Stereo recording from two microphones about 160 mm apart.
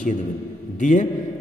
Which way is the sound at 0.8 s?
50° left (ahead or behind).